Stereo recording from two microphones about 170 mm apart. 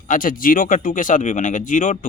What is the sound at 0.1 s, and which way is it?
Speech, 55° left (ahead or behind).